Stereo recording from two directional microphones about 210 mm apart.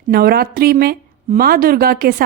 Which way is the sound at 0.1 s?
45° right (ahead or behind).